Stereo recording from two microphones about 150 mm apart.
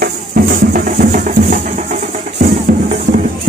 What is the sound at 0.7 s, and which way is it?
Music, 65° right (ahead or behind).